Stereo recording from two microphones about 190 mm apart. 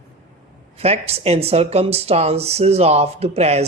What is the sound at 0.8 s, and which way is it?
Speech, 35° right (ahead or behind).